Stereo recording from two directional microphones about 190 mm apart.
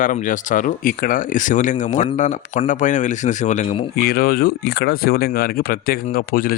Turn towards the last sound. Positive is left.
turn(degrees=50)  # may be behind; listen again after turning